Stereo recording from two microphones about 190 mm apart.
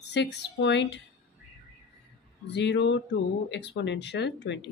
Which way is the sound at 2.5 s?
65° left (ahead or behind).